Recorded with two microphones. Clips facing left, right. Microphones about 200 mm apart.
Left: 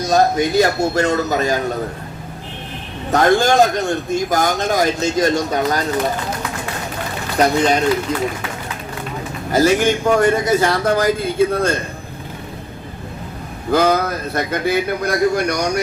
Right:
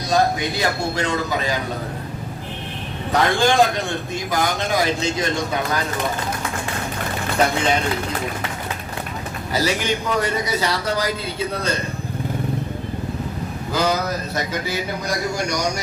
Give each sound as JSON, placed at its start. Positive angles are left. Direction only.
{"t": 0.0, "sound": "a man's voice", "side_deg": 45}
{"t": 3.1, "sound": "a man's voice", "side_deg": 45}
{"t": 7.3, "sound": "speech", "side_deg": 40}
{"t": 9.5, "sound": "a man's voice", "side_deg": 50}
{"t": 13.7, "sound": "a man's voice", "side_deg": 55}